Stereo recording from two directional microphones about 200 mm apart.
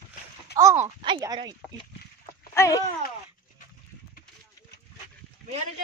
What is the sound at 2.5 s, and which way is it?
Speech, 15° left (ahead or behind).